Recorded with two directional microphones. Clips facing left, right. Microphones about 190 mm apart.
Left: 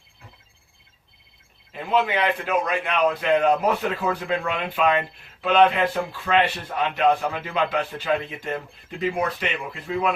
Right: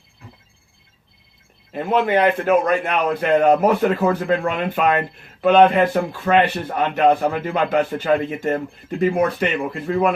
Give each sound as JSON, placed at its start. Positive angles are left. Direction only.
{"t": 1.7, "sound": "a man's voice", "side_deg": -50}